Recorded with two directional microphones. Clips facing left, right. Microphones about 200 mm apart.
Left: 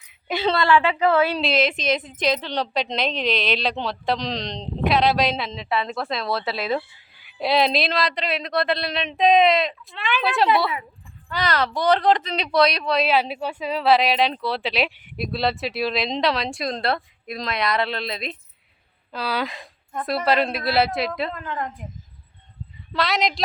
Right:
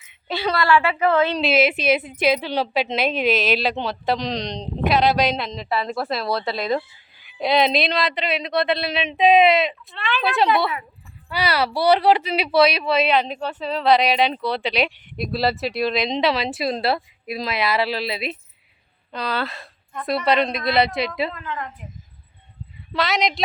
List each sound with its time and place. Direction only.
0.3 s a woman's voice: 20° left (ahead or behind)
0.9 s speech: 10° left (ahead or behind)
1.4 s speech: 5° right (ahead or behind)
19.1 s speech: 10° left (ahead or behind)
20.1 s speech: centre (ahead or behind)
21.3 s a woman's voice: 40° left (ahead or behind)
22.9 s speech: centre (ahead or behind)